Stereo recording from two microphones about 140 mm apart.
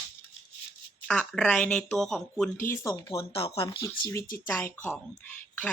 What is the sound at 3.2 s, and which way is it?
Speech, 45° left (ahead or behind).